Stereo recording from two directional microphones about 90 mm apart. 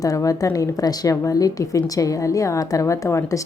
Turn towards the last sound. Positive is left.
turn(degrees=35)  # may be behind; listen again after turning